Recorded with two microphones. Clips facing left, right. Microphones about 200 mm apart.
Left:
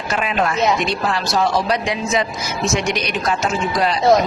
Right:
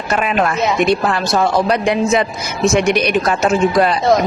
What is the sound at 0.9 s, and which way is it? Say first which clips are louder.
A man's voice: right 6 dB; 55° right (ahead or behind).